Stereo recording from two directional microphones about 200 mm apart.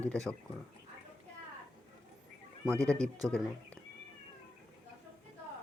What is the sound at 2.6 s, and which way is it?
Speech, 15° right (ahead or behind).